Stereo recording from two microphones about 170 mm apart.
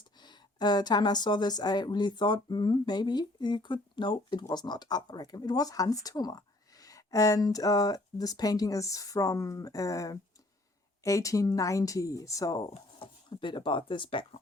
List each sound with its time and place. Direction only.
0.2 s speech: 25° left (ahead or behind)
12.7 s speech: 35° left (ahead or behind)